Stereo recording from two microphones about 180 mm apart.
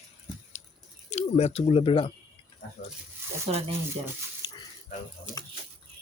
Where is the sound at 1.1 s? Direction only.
35° left (ahead or behind).